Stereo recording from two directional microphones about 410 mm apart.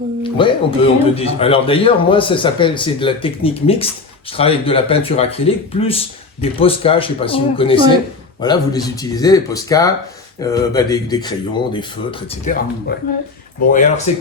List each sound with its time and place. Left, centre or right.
0.2 s speech: centre